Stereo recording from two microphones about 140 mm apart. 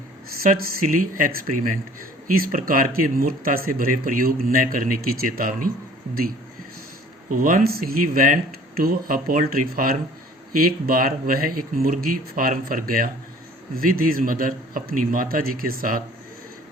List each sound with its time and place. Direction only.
0.5 s speech: 85° right
7.3 s speech: 80° right